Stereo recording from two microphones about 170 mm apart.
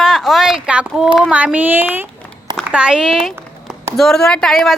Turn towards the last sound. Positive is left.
turn(degrees=0)  # may be behind; listen again after turning